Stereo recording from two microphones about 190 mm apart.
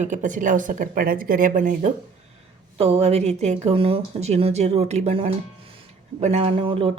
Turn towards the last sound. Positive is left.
turn(degrees=-30)  # may be behind; listen again after turning